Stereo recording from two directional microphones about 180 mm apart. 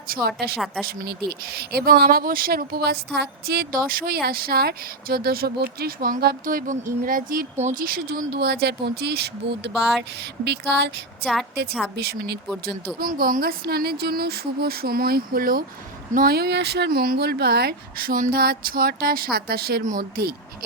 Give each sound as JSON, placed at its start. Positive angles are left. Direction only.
{"t": 0.1, "sound": "a woman's voice", "side_deg": -60}
{"t": 0.5, "sound": "speech", "side_deg": 0}
{"t": 1.5, "sound": "a woman's voice", "side_deg": -60}
{"t": 11.9, "sound": "speech", "side_deg": -65}
{"t": 13.0, "sound": "a woman's voice", "side_deg": -55}